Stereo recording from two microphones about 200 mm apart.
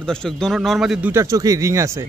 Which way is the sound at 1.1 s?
15° right (ahead or behind).